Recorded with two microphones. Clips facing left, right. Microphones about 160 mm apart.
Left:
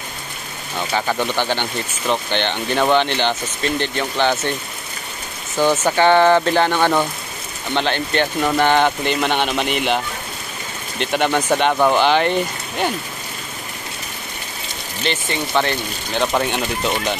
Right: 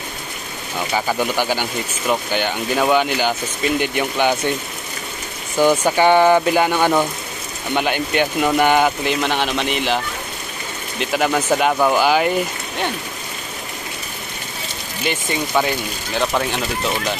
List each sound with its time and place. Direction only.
0.7 s speech: 10° right (ahead or behind)
5.6 s speech: 10° right (ahead or behind)
15.0 s speech: 10° right (ahead or behind)